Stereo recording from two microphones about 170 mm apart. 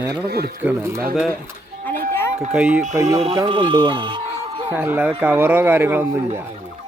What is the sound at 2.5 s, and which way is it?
Speech, 5° right (ahead or behind).